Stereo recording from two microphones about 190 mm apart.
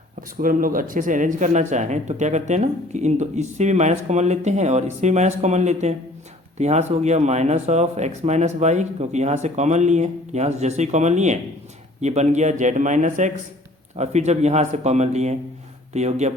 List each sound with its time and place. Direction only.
0.2 s speech: 45° right (ahead or behind)